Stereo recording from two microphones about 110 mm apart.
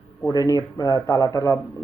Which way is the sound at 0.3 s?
30° left (ahead or behind).